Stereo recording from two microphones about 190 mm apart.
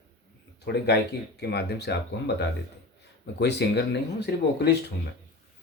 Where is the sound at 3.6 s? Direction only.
60° left (ahead or behind).